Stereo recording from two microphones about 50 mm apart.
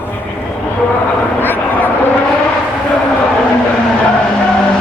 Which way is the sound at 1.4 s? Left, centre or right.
Left.